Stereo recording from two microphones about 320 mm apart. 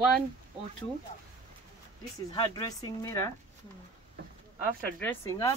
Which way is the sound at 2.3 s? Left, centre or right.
Centre.